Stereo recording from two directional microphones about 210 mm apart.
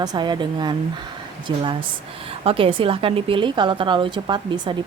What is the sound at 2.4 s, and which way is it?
A woman's voice, 25° right (ahead or behind).